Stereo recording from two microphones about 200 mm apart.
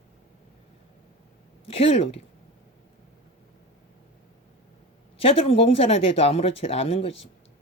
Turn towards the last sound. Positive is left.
turn(degrees=30)  # may be behind; listen again after turning